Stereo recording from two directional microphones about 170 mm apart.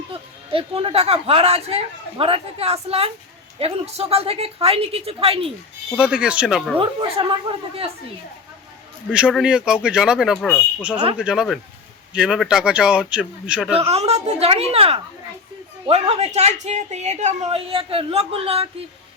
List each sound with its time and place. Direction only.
0.1 s speech: 35° right (ahead or behind)
6.0 s speech: 5° right (ahead or behind)
6.7 s speech: 30° right (ahead or behind)
9.3 s speech: 5° right (ahead or behind)
11.2 s speech: 5° right (ahead or behind)
13.7 s speech: 35° right (ahead or behind)